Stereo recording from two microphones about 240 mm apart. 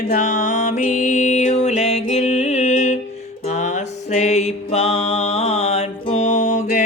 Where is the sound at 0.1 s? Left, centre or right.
Left.